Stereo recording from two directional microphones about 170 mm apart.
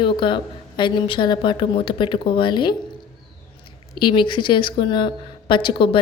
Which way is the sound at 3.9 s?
25° left (ahead or behind).